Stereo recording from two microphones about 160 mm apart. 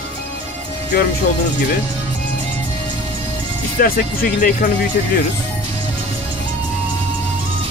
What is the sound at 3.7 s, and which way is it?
Speech, 65° left (ahead or behind).